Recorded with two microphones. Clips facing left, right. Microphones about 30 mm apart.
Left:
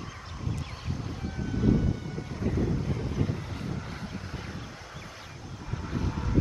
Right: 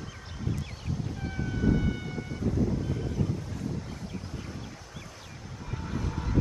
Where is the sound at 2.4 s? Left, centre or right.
Left.